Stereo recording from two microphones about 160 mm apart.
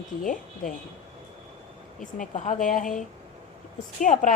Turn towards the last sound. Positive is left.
turn(degrees=55)  # may be behind; listen again after turning